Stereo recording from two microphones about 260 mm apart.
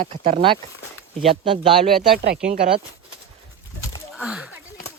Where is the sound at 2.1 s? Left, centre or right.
Right.